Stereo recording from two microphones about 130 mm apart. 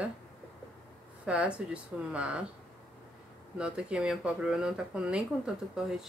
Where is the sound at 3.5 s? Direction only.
10° right (ahead or behind).